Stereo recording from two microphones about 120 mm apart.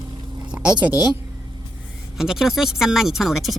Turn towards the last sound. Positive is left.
turn(degrees=0)  # may be behind; listen again after turning